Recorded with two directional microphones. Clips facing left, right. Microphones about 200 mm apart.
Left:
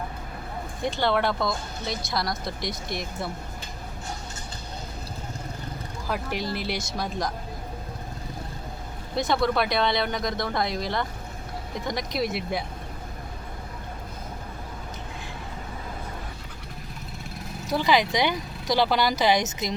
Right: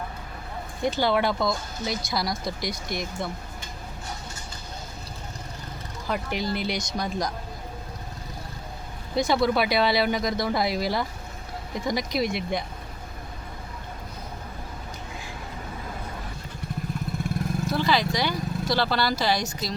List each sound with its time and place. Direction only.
0.9 s speech: centre (ahead or behind)
6.1 s speech: centre (ahead or behind)
9.1 s speech: centre (ahead or behind)
17.7 s speech: 15° left (ahead or behind)